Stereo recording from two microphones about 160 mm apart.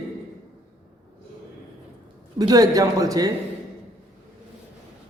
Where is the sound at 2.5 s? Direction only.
20° right (ahead or behind).